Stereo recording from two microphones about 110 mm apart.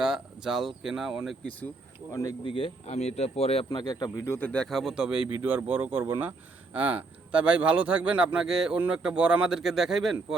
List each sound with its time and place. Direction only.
0.0 s speech: 5° right (ahead or behind)
2.4 s speech: 50° left (ahead or behind)
2.8 s a man's voice: 80° left
3.7 s speech: 40° left (ahead or behind)
4.3 s speech: 15° left (ahead or behind); by 10.3 s 5° right (ahead or behind)